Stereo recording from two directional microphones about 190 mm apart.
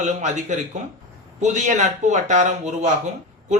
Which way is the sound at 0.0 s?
40° right (ahead or behind).